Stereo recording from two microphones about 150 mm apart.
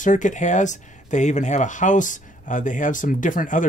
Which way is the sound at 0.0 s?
55° left (ahead or behind).